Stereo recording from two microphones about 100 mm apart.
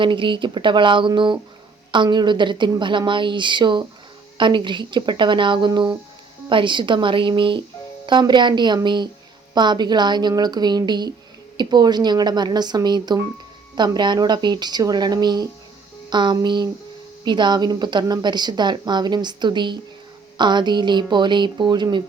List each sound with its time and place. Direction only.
0.0 s a woman's voice: 55° right (ahead or behind)